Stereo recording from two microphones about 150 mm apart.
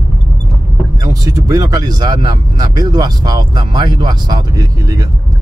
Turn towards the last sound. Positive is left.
turn(degrees=-25)  # may be behind; listen again after turning